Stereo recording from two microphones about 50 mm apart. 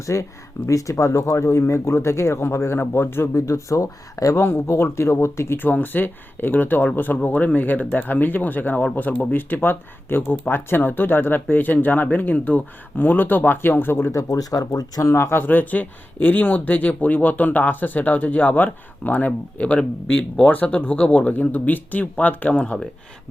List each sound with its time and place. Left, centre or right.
0.0 s speech: left
2.9 s speech: left
3.3 s speech: left
4.4 s speech: left
5.5 s speech: left
9.3 s speech: left
15.0 s speech: left
15.4 s speech: left